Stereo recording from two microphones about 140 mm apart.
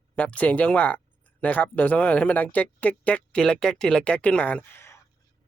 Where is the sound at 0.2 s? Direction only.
10° left (ahead or behind).